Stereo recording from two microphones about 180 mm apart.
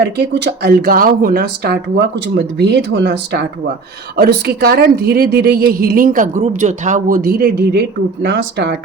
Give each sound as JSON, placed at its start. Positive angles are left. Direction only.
{"t": 0.2, "sound": "a woman's voice", "side_deg": -70}